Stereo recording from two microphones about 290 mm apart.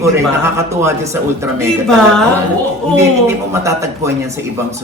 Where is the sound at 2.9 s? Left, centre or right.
Centre.